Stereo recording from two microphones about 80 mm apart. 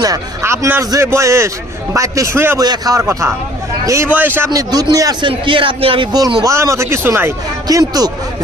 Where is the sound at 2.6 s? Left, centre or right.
Right.